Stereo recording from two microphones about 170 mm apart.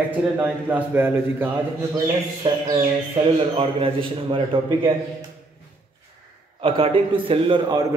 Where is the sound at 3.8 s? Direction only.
30° right (ahead or behind).